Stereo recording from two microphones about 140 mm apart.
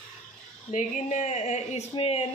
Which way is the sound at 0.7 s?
60° left (ahead or behind).